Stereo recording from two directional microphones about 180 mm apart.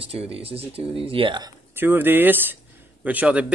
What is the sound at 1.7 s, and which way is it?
Speech, 10° right (ahead or behind).